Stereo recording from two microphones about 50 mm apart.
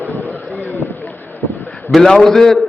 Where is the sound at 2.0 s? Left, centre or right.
Centre.